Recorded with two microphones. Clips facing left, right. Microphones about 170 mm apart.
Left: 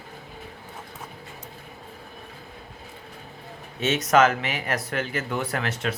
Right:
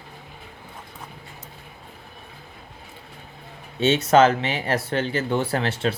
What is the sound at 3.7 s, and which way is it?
Speech, 30° right (ahead or behind).